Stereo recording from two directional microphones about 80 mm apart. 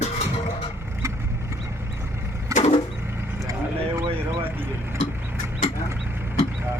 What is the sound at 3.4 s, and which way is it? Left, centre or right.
Vehicle, right.